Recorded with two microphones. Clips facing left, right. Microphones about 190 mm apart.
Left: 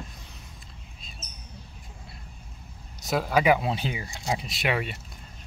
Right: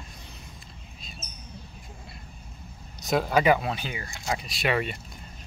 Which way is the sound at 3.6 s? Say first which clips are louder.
Left 2 dB; 25° left (ahead or behind).